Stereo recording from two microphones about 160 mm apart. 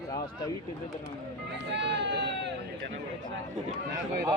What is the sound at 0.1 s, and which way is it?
Speech, 20° left (ahead or behind).